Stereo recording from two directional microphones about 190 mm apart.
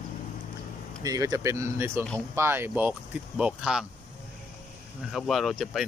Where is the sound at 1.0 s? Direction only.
20° right (ahead or behind).